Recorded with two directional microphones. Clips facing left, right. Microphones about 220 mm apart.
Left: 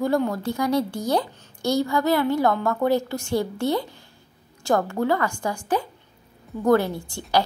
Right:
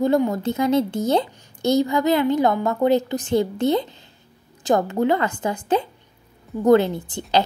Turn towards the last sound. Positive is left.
turn(degrees=-20)  # may be behind; listen again after turning